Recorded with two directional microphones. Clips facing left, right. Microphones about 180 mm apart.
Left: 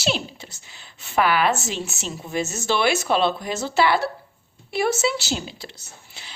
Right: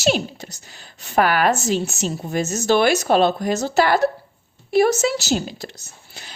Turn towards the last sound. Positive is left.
turn(degrees=-45)  # may be behind; listen again after turning